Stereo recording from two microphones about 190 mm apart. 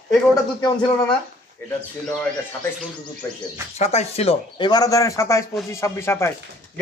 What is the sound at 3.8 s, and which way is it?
A man's voice, 35° left (ahead or behind).